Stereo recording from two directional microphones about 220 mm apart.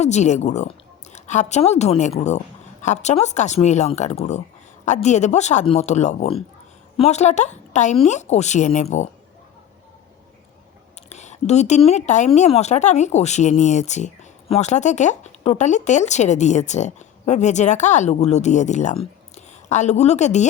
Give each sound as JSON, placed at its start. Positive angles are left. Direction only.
{"t": 0.0, "sound": "speech", "side_deg": 30}
{"t": 11.1, "sound": "a woman's voice", "side_deg": 30}